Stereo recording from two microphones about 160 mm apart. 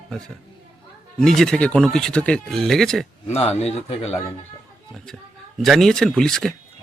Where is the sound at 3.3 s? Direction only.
40° left (ahead or behind).